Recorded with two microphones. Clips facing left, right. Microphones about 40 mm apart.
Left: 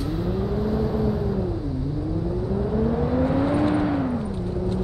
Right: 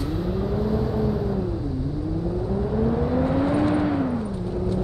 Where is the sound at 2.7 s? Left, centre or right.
Centre.